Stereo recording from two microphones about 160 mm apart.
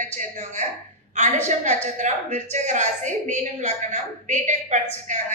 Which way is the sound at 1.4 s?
50° right (ahead or behind).